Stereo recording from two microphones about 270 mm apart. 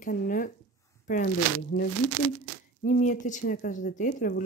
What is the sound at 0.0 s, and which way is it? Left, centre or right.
Speech, left.